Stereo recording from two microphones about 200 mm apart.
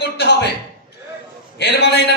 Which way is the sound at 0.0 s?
55° left (ahead or behind).